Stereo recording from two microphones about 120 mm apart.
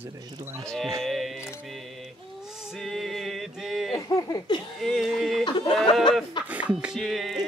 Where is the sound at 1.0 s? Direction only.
Centre (ahead or behind).